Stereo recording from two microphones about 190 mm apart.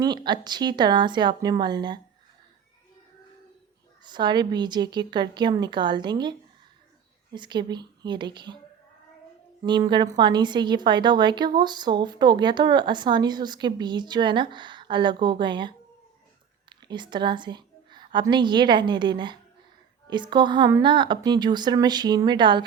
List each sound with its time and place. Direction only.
0.0 s a woman's voice: 20° right (ahead or behind)
4.0 s a woman's voice: 25° right (ahead or behind)
7.3 s a woman's voice: 25° right (ahead or behind)
9.6 s a woman's voice: 25° right (ahead or behind)